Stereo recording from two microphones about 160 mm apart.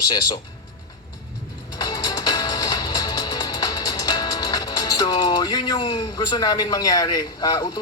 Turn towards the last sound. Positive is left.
turn(degrees=25)  # may be behind; listen again after turning